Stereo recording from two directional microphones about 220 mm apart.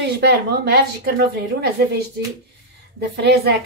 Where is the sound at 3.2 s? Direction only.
50° right (ahead or behind).